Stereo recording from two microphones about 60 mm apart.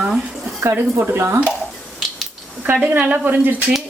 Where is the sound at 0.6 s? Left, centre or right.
Right.